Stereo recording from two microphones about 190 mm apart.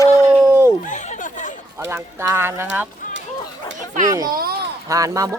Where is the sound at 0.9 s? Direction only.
40° left (ahead or behind).